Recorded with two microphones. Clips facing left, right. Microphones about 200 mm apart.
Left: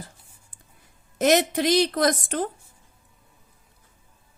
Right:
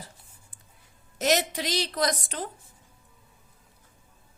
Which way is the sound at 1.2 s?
55° left (ahead or behind).